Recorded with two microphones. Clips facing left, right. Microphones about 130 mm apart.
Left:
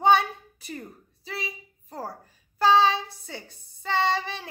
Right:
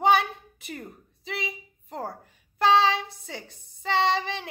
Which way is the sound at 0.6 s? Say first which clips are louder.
Left 1 dB; 55° right (ahead or behind).